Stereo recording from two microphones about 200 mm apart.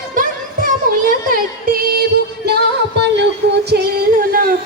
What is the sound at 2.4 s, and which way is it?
Music, 55° right (ahead or behind).